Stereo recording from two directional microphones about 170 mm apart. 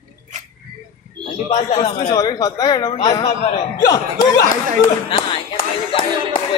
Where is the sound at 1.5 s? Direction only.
40° left (ahead or behind).